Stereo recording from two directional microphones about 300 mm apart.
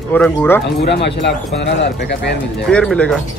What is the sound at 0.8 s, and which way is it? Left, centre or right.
Speech, left.